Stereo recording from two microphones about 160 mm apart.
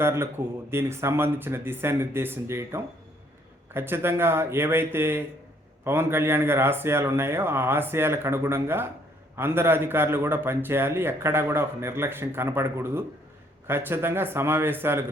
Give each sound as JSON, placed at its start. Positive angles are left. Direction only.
{"t": 0.0, "sound": "a man's voice", "side_deg": -15}